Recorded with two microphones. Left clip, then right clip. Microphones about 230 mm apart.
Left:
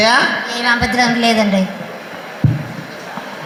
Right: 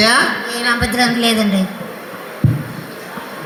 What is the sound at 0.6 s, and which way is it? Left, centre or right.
Speech, centre.